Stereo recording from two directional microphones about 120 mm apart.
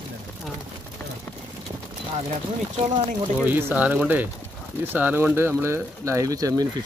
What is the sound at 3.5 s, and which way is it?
Speech, 15° right (ahead or behind).